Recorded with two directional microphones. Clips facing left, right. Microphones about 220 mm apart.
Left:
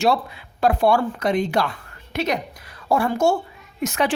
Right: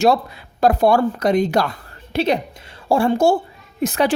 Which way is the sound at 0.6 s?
40° right (ahead or behind).